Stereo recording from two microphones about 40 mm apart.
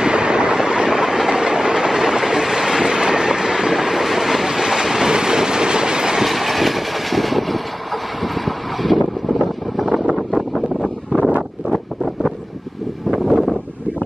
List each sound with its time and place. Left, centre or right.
0.0 s train: right
6.2 s vehicle: centre
13.1 s wind: centre